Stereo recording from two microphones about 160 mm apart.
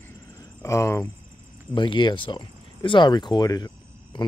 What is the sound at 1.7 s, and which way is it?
Speech, 30° left (ahead or behind).